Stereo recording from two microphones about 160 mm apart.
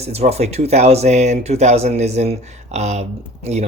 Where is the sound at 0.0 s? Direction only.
40° right (ahead or behind).